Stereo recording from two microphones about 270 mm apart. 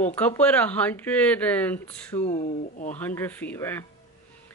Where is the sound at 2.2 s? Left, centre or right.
Left.